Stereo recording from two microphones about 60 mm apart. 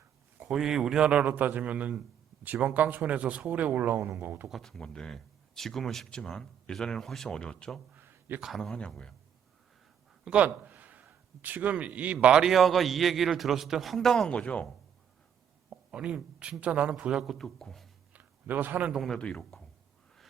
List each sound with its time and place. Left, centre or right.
0.4 s speech: centre
1.0 s a man's voice: right
4.4 s a man's voice: centre
7.9 s a sound: right
10.2 s a man's voice: centre
10.7 s a sound: right
12.1 s speech: centre
12.5 s a man's voice: centre
14.3 s speech: centre
15.7 s a man's voice: centre
17.2 s a man's voice: centre
18.1 s a sound: right
18.9 s a man's voice: centre